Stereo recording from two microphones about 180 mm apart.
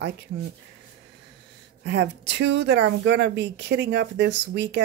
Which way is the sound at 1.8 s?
75° right (ahead or behind).